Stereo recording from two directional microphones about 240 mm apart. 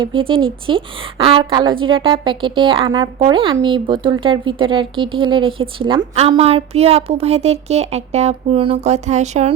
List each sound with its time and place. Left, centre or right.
0.0 s a woman's voice: right